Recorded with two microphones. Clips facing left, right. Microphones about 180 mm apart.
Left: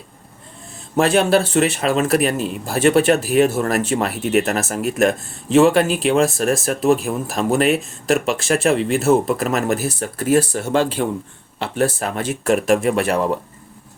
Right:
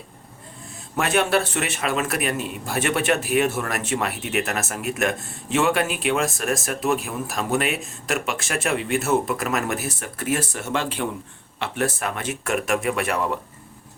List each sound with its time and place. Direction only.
0.9 s speech: 30° left (ahead or behind)